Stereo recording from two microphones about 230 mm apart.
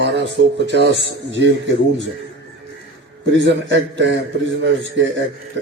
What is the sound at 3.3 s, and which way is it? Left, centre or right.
Speech, right.